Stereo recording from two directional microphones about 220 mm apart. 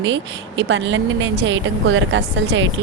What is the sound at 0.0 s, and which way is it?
A woman's voice, 55° right (ahead or behind).